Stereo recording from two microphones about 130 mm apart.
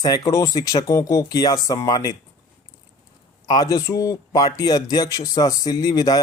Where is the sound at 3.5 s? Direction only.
30° left (ahead or behind).